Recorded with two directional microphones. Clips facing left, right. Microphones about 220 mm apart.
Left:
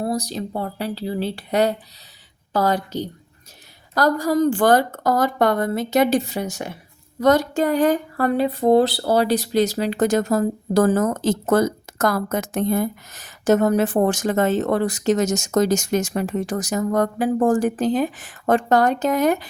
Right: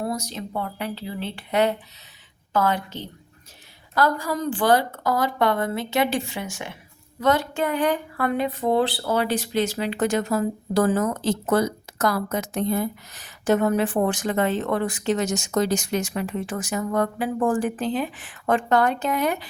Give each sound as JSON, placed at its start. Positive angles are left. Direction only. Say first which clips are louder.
{"t": 0.0, "sound": "speech", "louder": "left 4 dB", "side_deg": 35}